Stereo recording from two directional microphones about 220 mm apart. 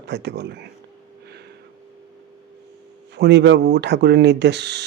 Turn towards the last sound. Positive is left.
turn(degrees=-50)  # may be behind; listen again after turning